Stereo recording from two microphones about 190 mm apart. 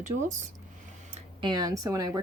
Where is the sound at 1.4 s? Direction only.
20° right (ahead or behind).